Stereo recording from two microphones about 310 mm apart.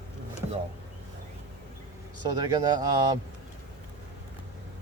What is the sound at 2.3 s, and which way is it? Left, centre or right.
Speech, centre.